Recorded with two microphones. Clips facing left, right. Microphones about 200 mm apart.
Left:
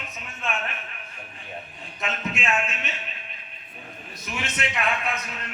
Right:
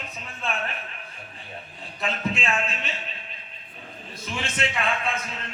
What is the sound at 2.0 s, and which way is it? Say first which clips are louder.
Speech: right 2 dB; 35° right (ahead or behind).